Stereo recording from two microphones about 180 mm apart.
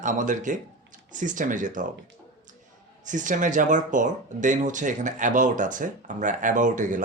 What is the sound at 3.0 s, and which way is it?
Speech, 45° right (ahead or behind).